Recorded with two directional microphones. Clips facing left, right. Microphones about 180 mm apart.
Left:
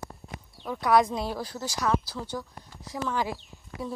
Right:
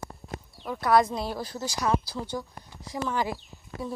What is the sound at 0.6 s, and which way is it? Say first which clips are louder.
Speech: even; 5° right (ahead or behind).